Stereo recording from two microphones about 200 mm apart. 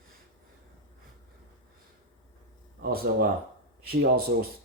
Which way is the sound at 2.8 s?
45° right (ahead or behind).